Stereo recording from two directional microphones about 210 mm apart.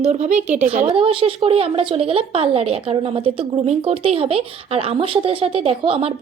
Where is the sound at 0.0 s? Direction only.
35° right (ahead or behind).